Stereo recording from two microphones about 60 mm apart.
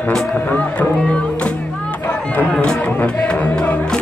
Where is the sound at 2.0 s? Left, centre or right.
Left.